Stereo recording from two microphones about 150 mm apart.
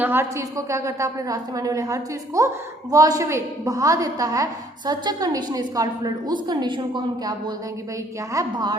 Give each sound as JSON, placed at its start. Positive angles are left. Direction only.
{"t": 0.0, "sound": "a woman's voice", "side_deg": -15}